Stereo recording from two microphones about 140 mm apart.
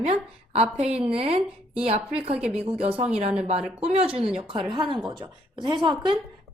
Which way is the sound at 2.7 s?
40° right (ahead or behind).